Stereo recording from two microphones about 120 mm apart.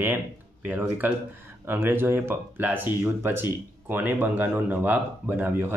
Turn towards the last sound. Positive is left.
turn(degrees=-15)  # may be behind; listen again after turning